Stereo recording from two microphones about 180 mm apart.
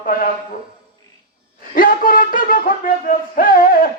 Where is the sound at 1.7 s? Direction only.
50° left (ahead or behind).